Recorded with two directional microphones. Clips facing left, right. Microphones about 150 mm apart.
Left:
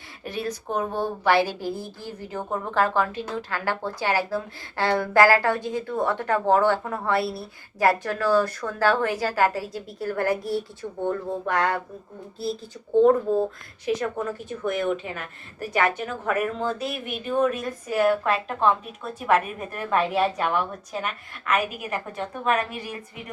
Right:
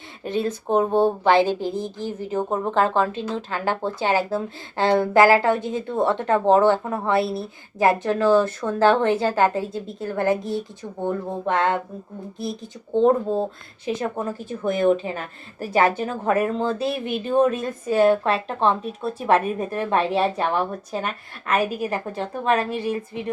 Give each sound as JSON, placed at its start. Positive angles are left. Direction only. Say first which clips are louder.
{"t": 0.3, "sound": "speech", "louder": "right 6 dB", "side_deg": -25}